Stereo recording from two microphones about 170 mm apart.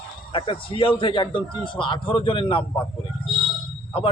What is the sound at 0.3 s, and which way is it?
A man's voice, 30° left (ahead or behind).